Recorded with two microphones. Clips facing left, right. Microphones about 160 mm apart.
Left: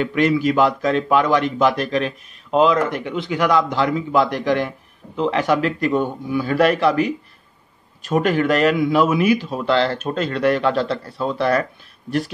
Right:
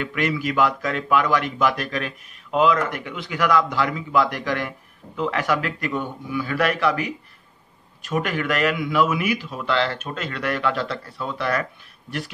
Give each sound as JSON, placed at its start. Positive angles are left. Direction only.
{"t": 0.0, "sound": "a man's voice", "side_deg": 30}